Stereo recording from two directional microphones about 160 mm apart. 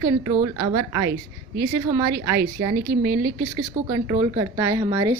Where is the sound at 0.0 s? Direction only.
20° right (ahead or behind).